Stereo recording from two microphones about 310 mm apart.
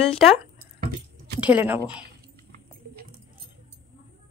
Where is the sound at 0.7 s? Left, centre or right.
Right.